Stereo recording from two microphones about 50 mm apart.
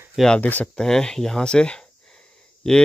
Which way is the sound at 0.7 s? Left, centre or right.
Centre.